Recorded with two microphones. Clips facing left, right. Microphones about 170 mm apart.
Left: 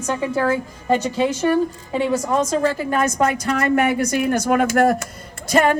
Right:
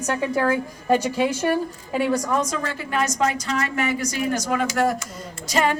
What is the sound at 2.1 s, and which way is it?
A woman's voice, 25° left (ahead or behind).